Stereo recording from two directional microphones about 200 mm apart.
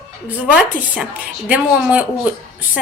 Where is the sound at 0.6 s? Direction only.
5° right (ahead or behind).